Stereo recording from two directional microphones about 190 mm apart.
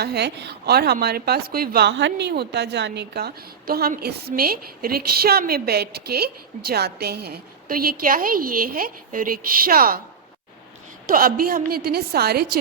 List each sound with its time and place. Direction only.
0.0 s a woman's voice: 60° right (ahead or behind)
11.1 s a woman's voice: 50° right (ahead or behind)